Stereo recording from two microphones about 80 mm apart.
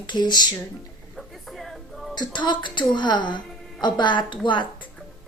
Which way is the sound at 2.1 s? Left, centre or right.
Left.